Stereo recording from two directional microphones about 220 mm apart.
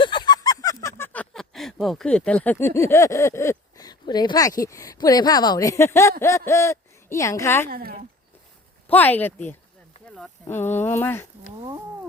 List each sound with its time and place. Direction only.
0.0 s speech: 20° left (ahead or behind)
7.7 s speech: 40° right (ahead or behind)
8.9 s speech: 10° left (ahead or behind)